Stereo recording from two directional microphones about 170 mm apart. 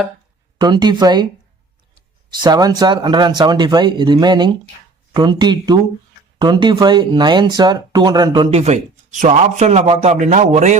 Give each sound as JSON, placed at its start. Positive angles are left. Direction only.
{"t": 0.6, "sound": "speech", "side_deg": -25}
{"t": 2.4, "sound": "speech", "side_deg": -25}